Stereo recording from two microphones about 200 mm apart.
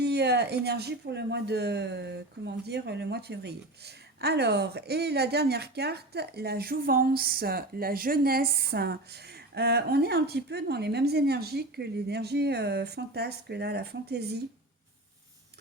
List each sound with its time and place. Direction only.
0.0 s a woman's voice: 55° right (ahead or behind)